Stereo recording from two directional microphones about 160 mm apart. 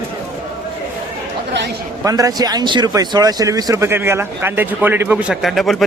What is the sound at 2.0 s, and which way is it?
Speech, 20° right (ahead or behind).